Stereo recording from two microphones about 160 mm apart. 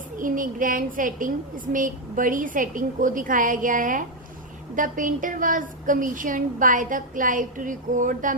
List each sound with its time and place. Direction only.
0.2 s a woman's voice: 55° right (ahead or behind)